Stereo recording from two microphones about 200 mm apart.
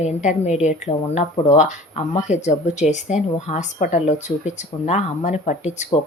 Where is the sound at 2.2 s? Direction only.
35° left (ahead or behind).